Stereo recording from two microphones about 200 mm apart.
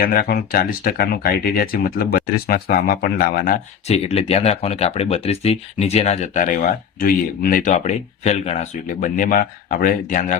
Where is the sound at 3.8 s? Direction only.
30° left (ahead or behind).